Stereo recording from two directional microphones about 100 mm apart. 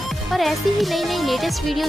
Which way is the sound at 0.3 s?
Centre (ahead or behind).